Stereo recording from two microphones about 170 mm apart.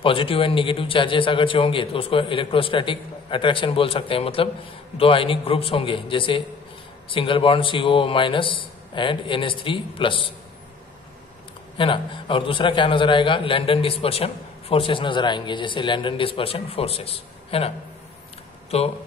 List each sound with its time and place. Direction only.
0.0 s a man's voice: 30° left (ahead or behind)
11.7 s a man's voice: 30° left (ahead or behind)